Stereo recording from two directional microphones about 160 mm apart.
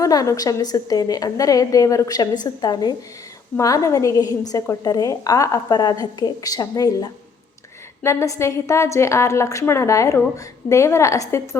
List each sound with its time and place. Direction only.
0.0 s a woman's voice: 20° left (ahead or behind)